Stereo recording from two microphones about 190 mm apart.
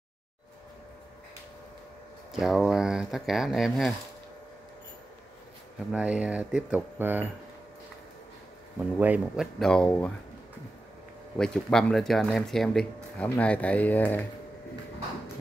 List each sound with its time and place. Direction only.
2.3 s speech: centre (ahead or behind)
5.9 s speech: 5° right (ahead or behind)
8.7 s speech: 5° right (ahead or behind)
9.6 s speech: 5° left (ahead or behind)
11.3 s speech: 5° left (ahead or behind)